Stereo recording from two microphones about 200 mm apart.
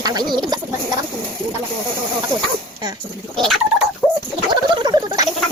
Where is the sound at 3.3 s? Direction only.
Centre (ahead or behind).